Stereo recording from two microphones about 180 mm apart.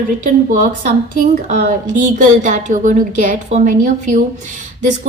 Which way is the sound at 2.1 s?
45° right (ahead or behind).